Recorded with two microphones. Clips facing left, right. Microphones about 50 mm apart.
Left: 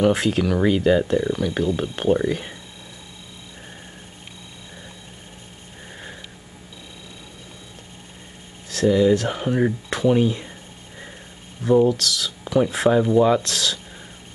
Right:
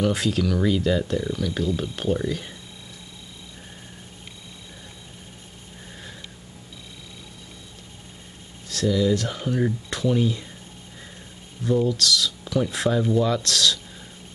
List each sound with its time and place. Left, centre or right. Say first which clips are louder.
0.0 s speech: left 4 dB; left
8.6 s speech: left 5 dB; left
11.6 s speech: left 5 dB; left